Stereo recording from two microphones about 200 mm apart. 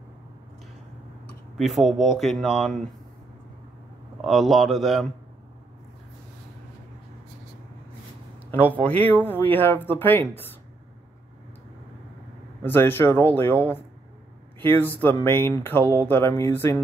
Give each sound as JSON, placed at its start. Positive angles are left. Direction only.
{"t": 1.6, "sound": "speech", "side_deg": 0}
{"t": 4.2, "sound": "speech", "side_deg": 0}
{"t": 8.5, "sound": "speech", "side_deg": 10}
{"t": 12.6, "sound": "speech", "side_deg": 10}